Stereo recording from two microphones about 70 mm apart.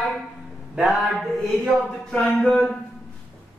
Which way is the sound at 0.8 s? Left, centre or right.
Centre.